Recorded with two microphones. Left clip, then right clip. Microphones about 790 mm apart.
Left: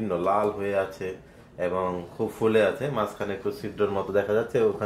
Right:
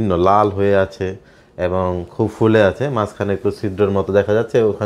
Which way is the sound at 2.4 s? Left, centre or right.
Right.